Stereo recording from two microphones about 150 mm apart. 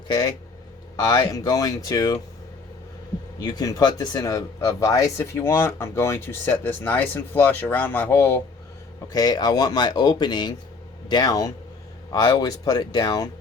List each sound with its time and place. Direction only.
0.1 s speech: 25° left (ahead or behind)
3.4 s speech: 25° left (ahead or behind)
9.1 s speech: 25° left (ahead or behind)